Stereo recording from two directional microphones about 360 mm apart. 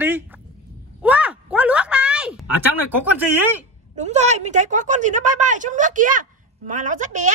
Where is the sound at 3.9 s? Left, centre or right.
Centre.